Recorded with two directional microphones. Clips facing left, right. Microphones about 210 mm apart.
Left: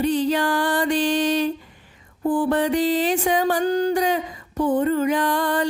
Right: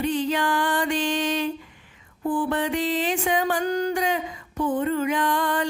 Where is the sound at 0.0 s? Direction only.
35° left (ahead or behind).